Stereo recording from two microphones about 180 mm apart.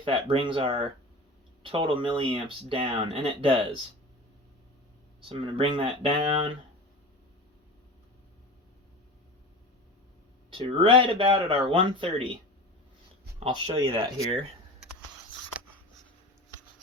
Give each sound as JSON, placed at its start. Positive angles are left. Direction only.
{"t": 0.0, "sound": "speech", "side_deg": -30}
{"t": 5.3, "sound": "speech", "side_deg": -30}
{"t": 10.5, "sound": "speech", "side_deg": -30}
{"t": 13.4, "sound": "speech", "side_deg": -30}
{"t": 13.9, "sound": "speech", "side_deg": -15}